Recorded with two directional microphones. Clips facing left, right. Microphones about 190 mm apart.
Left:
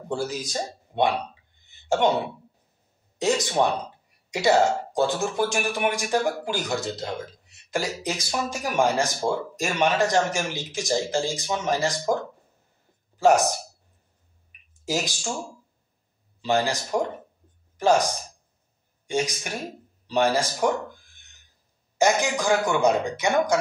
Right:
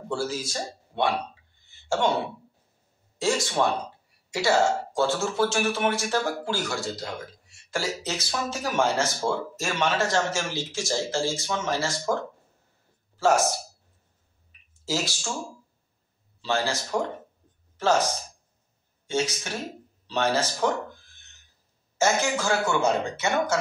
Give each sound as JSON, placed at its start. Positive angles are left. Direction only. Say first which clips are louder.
{"t": 0.1, "sound": "speech", "louder": "left 1 dB", "side_deg": 15}
{"t": 1.7, "sound": "throat clearing", "louder": "left 3 dB", "side_deg": 20}
{"t": 3.2, "sound": "speech", "louder": "left 2 dB", "side_deg": 20}
{"t": 13.2, "sound": "speech", "louder": "left 3 dB", "side_deg": 15}
{"t": 14.9, "sound": "speech", "louder": "left 1 dB", "side_deg": 15}
{"t": 16.3, "sound": "speech", "louder": "left 3 dB", "side_deg": 15}
{"t": 21.9, "sound": "speech", "louder": "left 2 dB", "side_deg": 15}